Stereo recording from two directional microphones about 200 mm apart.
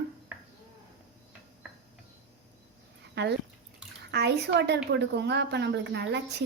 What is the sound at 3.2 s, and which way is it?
A woman's voice, 55° right (ahead or behind).